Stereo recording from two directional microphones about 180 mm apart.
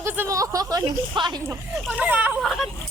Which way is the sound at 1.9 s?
10° right (ahead or behind).